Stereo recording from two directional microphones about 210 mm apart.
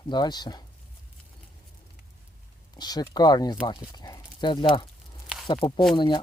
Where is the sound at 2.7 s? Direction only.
20° left (ahead or behind).